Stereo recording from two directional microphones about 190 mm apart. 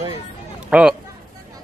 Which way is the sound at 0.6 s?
5° right (ahead or behind).